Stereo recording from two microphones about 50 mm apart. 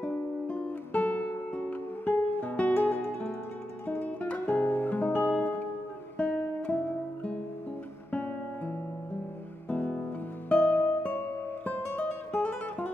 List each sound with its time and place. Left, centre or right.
0.0 s music: left
4.6 s guitar: left
6.1 s music: left
8.1 s guitar: left
9.7 s music: left